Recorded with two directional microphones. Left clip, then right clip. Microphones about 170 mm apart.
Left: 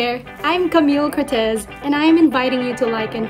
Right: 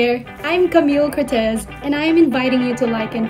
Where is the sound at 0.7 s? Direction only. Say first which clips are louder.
Right 1 dB; 10° left (ahead or behind).